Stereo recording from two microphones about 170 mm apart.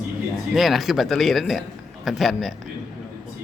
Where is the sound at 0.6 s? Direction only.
Centre (ahead or behind).